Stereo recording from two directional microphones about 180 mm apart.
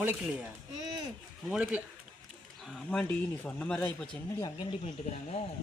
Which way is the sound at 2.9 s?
10° left (ahead or behind).